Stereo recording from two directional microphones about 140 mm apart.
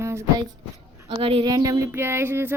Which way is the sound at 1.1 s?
40° right (ahead or behind).